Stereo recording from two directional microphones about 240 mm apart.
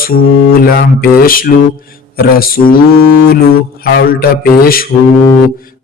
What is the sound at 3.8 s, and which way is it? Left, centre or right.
A man's voice, left.